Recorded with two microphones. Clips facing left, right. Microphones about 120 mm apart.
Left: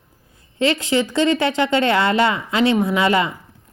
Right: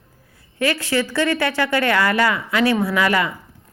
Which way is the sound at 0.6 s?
20° left (ahead or behind).